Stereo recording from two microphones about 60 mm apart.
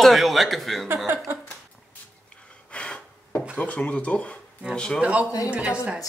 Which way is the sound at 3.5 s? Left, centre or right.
Left.